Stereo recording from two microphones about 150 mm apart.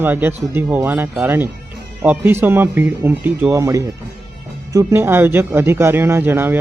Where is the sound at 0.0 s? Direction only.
15° right (ahead or behind).